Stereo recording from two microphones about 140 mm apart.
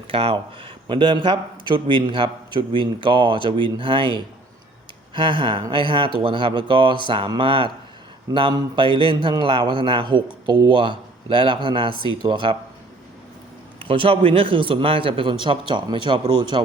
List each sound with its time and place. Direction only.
0.1 s speech: 40° right (ahead or behind)
13.7 s speech: 40° right (ahead or behind)